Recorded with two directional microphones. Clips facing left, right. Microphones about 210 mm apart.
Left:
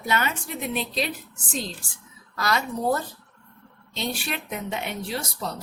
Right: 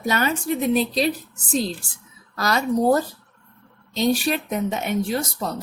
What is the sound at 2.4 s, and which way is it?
Speech, 40° right (ahead or behind).